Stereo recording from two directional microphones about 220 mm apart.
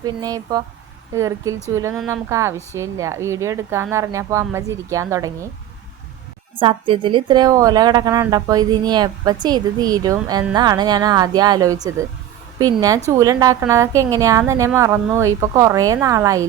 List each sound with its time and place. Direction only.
0.0 s a woman's voice: 15° right (ahead or behind)
6.6 s a woman's voice: 25° right (ahead or behind)
13.1 s a woman's voice: 15° right (ahead or behind)